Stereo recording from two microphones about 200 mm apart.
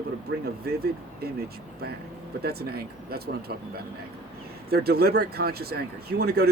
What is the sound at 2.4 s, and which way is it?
Speech, 50° right (ahead or behind).